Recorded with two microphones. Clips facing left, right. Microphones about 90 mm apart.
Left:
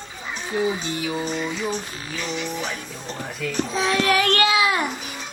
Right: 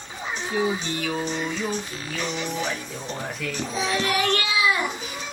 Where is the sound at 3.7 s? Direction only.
75° left (ahead or behind).